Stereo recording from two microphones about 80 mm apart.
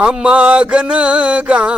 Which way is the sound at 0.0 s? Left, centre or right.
Centre.